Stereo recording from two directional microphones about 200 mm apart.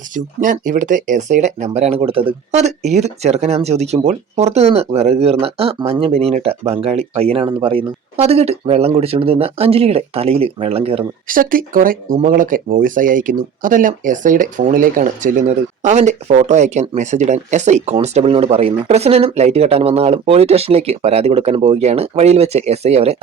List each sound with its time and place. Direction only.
0.4 s speech: 40° right (ahead or behind)
11.3 s speech: 45° right (ahead or behind)